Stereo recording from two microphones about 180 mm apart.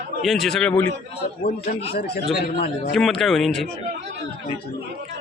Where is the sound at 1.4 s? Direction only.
60° left (ahead or behind).